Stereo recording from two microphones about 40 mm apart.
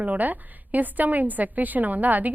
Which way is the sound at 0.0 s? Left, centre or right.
Right.